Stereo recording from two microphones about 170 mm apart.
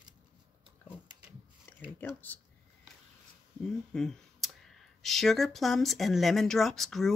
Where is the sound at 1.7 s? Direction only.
10° left (ahead or behind).